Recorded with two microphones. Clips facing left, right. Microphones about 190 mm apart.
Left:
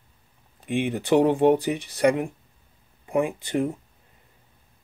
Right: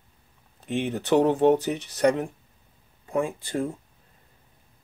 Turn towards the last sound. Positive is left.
turn(degrees=20)  # may be behind; listen again after turning